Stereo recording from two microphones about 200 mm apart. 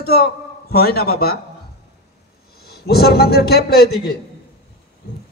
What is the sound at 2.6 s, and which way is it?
A man's voice, 50° left (ahead or behind).